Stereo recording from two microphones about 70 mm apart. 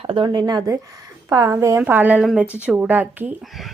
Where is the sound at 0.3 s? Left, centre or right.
Right.